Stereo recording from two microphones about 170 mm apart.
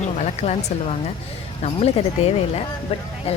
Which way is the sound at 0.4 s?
35° left (ahead or behind).